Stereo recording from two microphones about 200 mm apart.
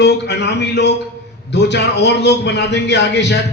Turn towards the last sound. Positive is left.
turn(degrees=60)  # may be behind; listen again after turning